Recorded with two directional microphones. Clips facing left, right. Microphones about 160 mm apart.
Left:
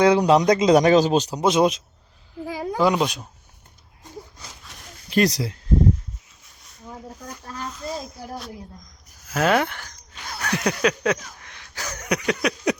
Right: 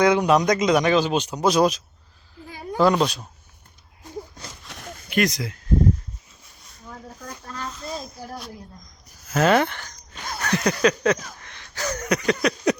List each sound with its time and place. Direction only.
0.0 s a man's voice: 30° left (ahead or behind)
1.4 s speech: 25° left (ahead or behind)
2.7 s speech: 10° left (ahead or behind)
5.0 s speech: 35° left (ahead or behind)
6.9 s a sound: 10° left (ahead or behind)
9.3 s speech: 5° left (ahead or behind)
10.3 s a sound: 5° left (ahead or behind)